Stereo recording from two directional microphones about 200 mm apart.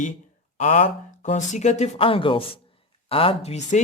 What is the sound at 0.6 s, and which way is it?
Speech, 35° left (ahead or behind).